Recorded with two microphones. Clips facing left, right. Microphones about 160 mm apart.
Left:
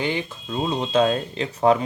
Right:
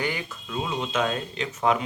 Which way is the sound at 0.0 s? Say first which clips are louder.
Left 4 dB; 25° left (ahead or behind).